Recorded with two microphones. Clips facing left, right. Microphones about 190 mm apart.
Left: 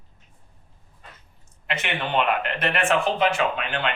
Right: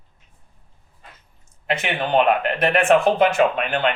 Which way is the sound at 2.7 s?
45° right (ahead or behind).